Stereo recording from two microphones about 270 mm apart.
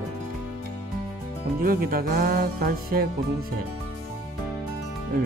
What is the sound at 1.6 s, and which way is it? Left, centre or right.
Music, right.